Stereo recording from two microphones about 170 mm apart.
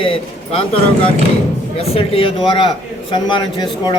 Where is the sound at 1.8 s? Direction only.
35° left (ahead or behind).